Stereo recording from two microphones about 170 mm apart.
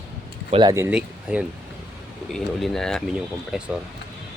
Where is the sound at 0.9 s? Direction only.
5° right (ahead or behind).